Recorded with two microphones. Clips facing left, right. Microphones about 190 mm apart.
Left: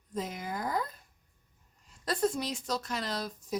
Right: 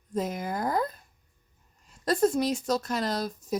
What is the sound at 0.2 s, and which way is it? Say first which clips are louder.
Speech: right 6 dB; 45° right (ahead or behind).